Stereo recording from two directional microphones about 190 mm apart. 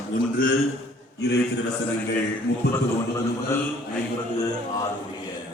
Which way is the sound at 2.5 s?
60° left (ahead or behind).